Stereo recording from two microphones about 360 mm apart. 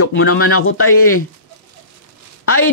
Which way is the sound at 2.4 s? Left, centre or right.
Left.